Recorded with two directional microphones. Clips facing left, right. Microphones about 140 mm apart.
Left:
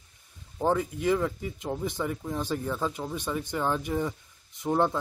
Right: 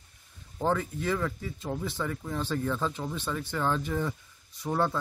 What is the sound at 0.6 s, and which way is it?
Speech, 15° left (ahead or behind).